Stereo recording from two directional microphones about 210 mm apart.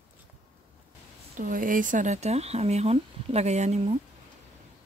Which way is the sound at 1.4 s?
40° right (ahead or behind).